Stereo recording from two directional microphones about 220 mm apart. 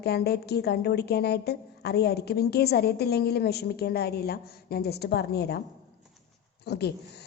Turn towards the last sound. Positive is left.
turn(degrees=50)  # may be behind; listen again after turning